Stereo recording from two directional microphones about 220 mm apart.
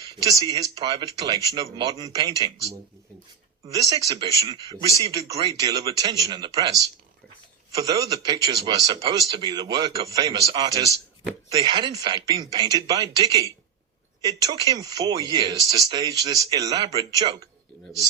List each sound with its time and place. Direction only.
0.0 s a man's voice: 15° right (ahead or behind)
3.7 s a man's voice: 15° right (ahead or behind)